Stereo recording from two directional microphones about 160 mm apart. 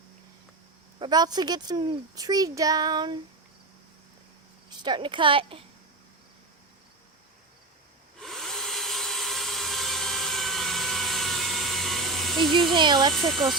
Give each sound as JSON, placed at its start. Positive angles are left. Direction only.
{"t": 0.9, "sound": "a child's voice", "side_deg": -25}
{"t": 4.8, "sound": "speech", "side_deg": -30}
{"t": 8.2, "sound": "tools", "side_deg": 0}
{"t": 12.7, "sound": "a child's voice", "side_deg": -30}
{"t": 13.1, "sound": "speech", "side_deg": 0}